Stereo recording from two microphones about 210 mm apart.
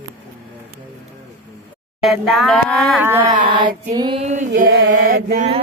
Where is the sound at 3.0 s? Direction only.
10° right (ahead or behind).